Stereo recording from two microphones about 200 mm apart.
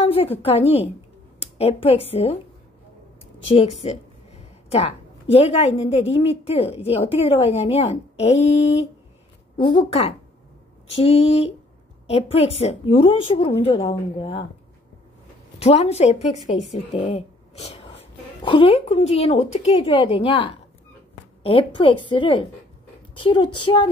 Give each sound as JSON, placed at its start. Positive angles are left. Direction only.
{"t": 0.0, "sound": "a woman's voice", "side_deg": 30}
{"t": 3.4, "sound": "a sound", "side_deg": 30}
{"t": 5.3, "sound": "a woman's voice", "side_deg": 30}
{"t": 15.6, "sound": "a woman's voice", "side_deg": 30}